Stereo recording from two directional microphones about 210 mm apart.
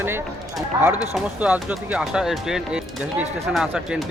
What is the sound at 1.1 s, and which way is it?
Speech, 5° right (ahead or behind).